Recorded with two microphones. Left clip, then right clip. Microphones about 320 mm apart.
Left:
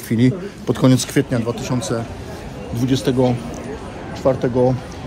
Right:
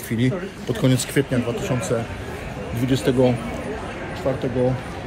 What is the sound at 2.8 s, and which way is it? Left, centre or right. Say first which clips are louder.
Speech: left 1 dB; centre.